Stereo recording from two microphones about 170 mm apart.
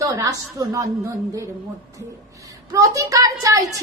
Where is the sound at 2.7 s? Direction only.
20° right (ahead or behind).